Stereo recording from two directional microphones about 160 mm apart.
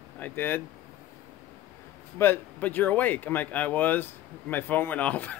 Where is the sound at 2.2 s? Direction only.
10° left (ahead or behind).